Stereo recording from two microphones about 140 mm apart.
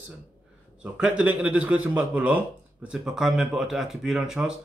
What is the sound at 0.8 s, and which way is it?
A man's voice, 5° right (ahead or behind).